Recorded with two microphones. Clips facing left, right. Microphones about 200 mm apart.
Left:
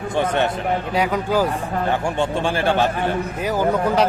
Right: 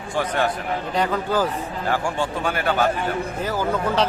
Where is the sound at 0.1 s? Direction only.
25° left (ahead or behind).